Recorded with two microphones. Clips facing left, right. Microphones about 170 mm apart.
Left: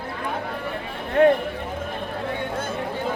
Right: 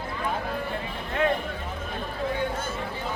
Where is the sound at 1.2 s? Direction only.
55° left (ahead or behind).